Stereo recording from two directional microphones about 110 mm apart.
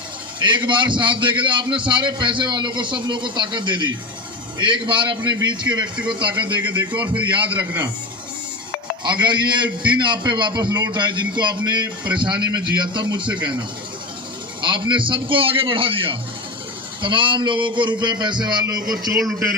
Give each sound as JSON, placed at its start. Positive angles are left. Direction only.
{"t": 0.3, "sound": "a man's voice", "side_deg": -45}
{"t": 7.4, "sound": "a man's voice", "side_deg": -15}
{"t": 9.0, "sound": "a man's voice", "side_deg": -40}